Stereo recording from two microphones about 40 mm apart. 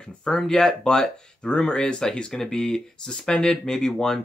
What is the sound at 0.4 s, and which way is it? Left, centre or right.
Speech, centre.